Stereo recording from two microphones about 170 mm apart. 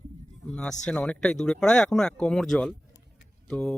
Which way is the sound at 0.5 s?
5° left (ahead or behind).